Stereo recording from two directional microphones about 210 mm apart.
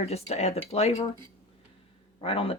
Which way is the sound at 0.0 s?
30° left (ahead or behind).